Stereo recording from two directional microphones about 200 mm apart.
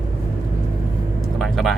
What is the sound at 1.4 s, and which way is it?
Speech, centre (ahead or behind).